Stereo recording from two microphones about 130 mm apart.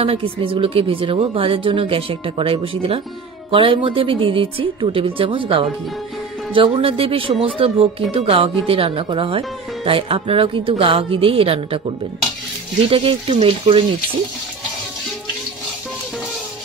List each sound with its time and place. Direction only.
0.0 s speech: 45° right (ahead or behind)
12.9 s speech: 45° right (ahead or behind)